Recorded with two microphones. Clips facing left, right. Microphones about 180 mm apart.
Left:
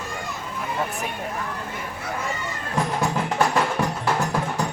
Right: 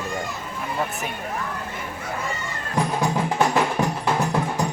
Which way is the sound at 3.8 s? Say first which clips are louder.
Right 1 dB; 20° right (ahead or behind).